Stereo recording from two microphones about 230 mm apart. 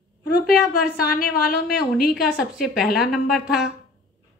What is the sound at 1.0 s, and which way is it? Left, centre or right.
Speech, left.